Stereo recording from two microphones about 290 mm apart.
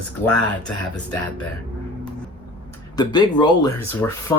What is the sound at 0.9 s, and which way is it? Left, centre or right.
Speech, centre.